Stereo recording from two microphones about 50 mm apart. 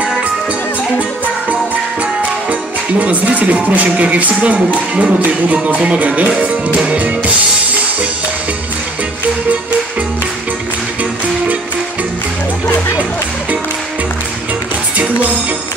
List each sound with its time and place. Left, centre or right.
3.0 s music: right